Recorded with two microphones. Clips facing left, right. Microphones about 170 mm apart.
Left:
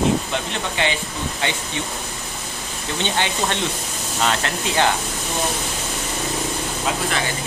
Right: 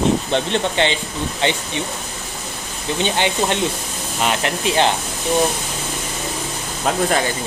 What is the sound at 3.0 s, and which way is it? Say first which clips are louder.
Speech: right 3 dB; 20° right (ahead or behind).